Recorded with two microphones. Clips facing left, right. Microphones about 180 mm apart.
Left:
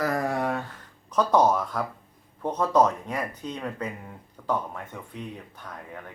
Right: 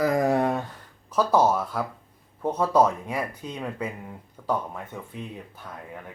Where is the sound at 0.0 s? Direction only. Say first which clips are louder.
Right 4 dB; 20° right (ahead or behind).